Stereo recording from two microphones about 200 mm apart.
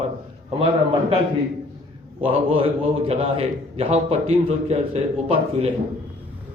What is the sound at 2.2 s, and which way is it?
A man's voice, 30° right (ahead or behind).